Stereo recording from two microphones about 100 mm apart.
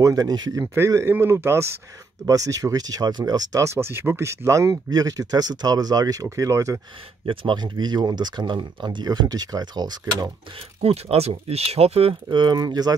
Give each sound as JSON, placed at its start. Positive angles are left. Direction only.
{"t": 0.0, "sound": "speech", "side_deg": -40}
{"t": 0.7, "sound": "speech", "side_deg": -25}
{"t": 7.2, "sound": "speech", "side_deg": -50}
{"t": 10.8, "sound": "speech", "side_deg": -80}
{"t": 12.3, "sound": "speech", "side_deg": -45}